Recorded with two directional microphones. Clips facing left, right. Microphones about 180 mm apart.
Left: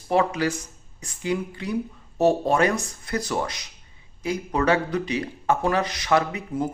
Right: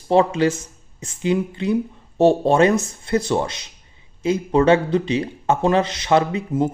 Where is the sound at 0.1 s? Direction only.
25° right (ahead or behind).